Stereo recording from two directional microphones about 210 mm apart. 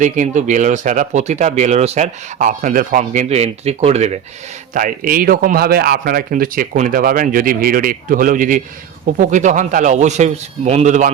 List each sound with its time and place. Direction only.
0.0 s speech: 35° right (ahead or behind)